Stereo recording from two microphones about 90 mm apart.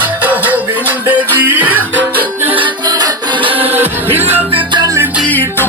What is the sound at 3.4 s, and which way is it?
Music, 85° right.